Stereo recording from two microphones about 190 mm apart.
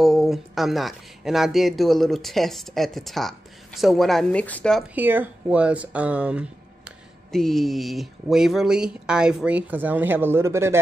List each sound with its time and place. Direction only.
0.0 s speech: centre (ahead or behind)
4.9 s speech: 10° right (ahead or behind)